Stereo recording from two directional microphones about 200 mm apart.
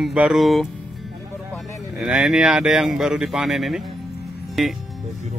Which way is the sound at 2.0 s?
Centre (ahead or behind).